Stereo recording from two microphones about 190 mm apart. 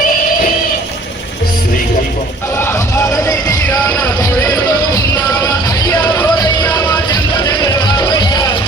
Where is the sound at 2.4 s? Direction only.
15° left (ahead or behind).